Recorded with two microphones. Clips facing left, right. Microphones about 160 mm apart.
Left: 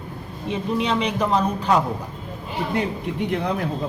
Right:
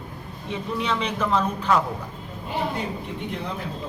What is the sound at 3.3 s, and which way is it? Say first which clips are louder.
Speech: left 9 dB; 70° left (ahead or behind).